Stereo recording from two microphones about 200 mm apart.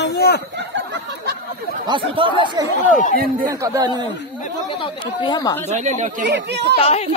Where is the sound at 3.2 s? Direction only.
45° right (ahead or behind).